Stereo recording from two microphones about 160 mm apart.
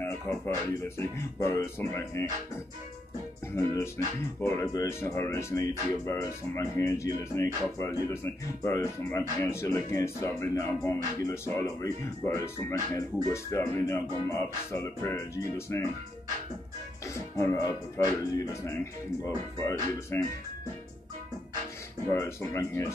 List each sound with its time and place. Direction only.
0.0 s speech: 15° left (ahead or behind)
3.5 s speech: 15° left (ahead or behind)
17.4 s speech: 20° left (ahead or behind)
20.1 s speech: 15° left (ahead or behind)
22.1 s speech: 20° left (ahead or behind)